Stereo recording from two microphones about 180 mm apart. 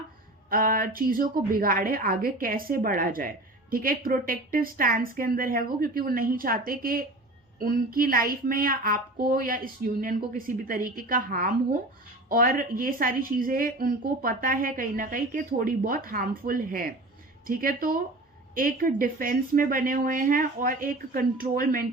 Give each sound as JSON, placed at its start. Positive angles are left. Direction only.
{"t": 0.5, "sound": "a woman's voice", "side_deg": -50}